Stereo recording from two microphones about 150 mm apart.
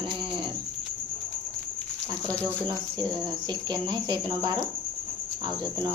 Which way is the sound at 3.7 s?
30° right (ahead or behind).